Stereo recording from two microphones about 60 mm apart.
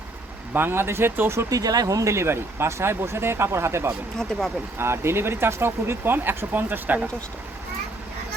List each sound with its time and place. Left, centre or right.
0.5 s speech: right
1.5 s speech: right
2.1 s speech: right
4.2 s speech: centre
4.8 s speech: right